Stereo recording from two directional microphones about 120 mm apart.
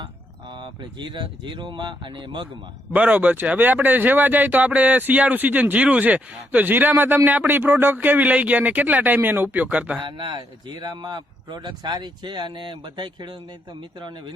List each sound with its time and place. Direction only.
0.6 s speech: 40° right (ahead or behind)
2.9 s speech: 15° right (ahead or behind)
10.0 s speech: 40° right (ahead or behind)